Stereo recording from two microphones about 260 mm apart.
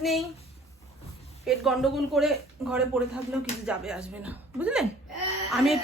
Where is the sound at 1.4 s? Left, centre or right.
Centre.